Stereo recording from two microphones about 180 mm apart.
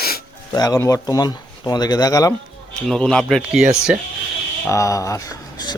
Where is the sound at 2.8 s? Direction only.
5° left (ahead or behind).